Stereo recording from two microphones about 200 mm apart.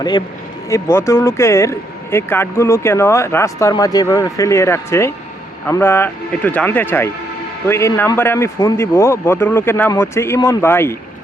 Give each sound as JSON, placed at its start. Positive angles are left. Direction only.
{"t": 0.7, "sound": "speech", "side_deg": 15}